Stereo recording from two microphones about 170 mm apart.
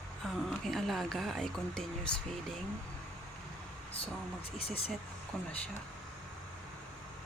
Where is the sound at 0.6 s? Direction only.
Centre (ahead or behind).